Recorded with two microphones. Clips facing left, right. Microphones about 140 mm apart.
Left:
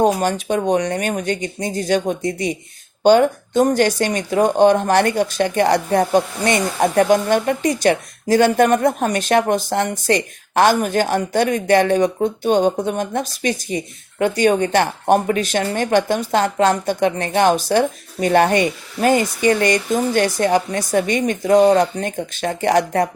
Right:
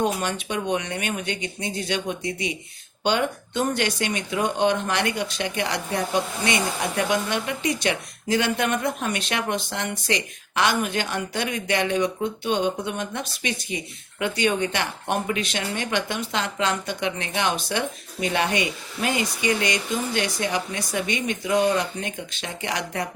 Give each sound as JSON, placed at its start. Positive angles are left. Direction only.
{"t": 0.0, "sound": "speech", "side_deg": 40}